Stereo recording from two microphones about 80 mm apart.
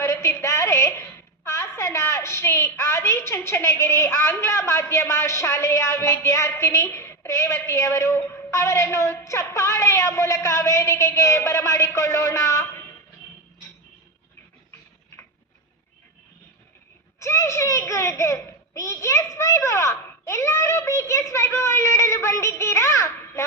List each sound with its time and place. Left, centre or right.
0.0 s a sound: left
1.5 s a woman's voice: left
17.2 s a child's voice: left